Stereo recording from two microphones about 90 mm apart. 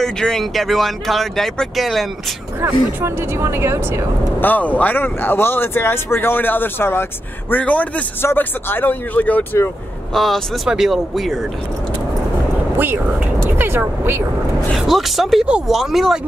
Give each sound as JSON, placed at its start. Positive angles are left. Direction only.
{"t": 0.0, "sound": "speech", "side_deg": 5}
{"t": 2.6, "sound": "speech", "side_deg": -25}
{"t": 4.4, "sound": "speech", "side_deg": 20}
{"t": 10.1, "sound": "speech", "side_deg": 0}
{"t": 12.7, "sound": "speech", "side_deg": -25}
{"t": 14.8, "sound": "speech", "side_deg": 0}